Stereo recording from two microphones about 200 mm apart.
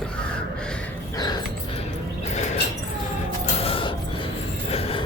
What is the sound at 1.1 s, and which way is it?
Dog, 20° left (ahead or behind).